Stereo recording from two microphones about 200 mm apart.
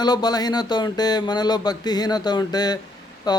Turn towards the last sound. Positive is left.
turn(degrees=20)  # may be behind; listen again after turning